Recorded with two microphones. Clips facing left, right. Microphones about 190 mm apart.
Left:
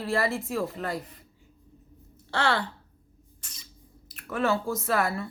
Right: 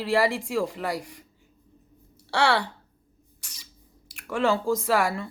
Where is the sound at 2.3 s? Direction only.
75° right (ahead or behind).